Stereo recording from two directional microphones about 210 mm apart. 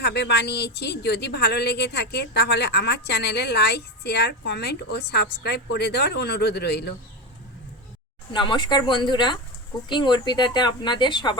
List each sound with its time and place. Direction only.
0.0 s speech: 55° left (ahead or behind)
8.3 s speech: 20° left (ahead or behind)